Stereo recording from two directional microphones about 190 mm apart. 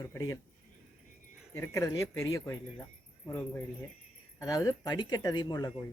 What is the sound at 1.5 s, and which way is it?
Speech, 15° left (ahead or behind).